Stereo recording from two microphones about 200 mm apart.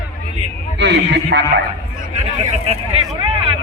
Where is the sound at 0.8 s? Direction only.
60° right (ahead or behind).